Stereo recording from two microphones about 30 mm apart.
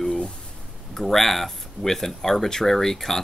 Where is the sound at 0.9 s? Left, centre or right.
Centre.